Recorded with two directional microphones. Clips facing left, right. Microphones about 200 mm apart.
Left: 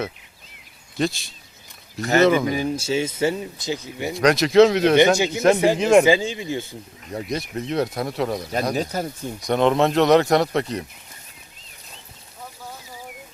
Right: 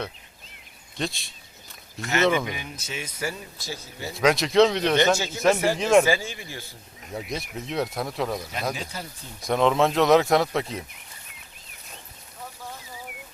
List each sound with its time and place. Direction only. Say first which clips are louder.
0.9 s speech: left 7 dB; centre (ahead or behind)
2.0 s speech: left 6 dB; 35° left (ahead or behind); by 4.1 s 20° left (ahead or behind)
4.1 s speech: left 4 dB; centre (ahead or behind)
4.9 s speech: left 6 dB; 15° left (ahead or behind)
7.1 s speech: left 5 dB; centre (ahead or behind)
8.7 s speech: left 10 dB; 40° left (ahead or behind)
9.5 s speech: left 3 dB; centre (ahead or behind)